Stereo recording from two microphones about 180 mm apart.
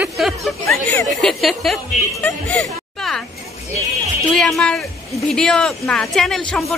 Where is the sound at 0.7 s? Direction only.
10° left (ahead or behind).